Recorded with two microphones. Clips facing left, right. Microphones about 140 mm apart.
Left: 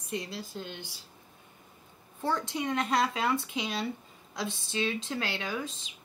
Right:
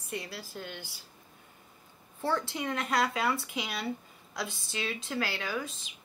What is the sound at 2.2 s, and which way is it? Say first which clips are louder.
Speech: left 1 dB; 20° left (ahead or behind).